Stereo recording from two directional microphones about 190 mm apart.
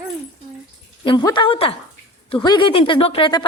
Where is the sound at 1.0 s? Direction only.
25° left (ahead or behind).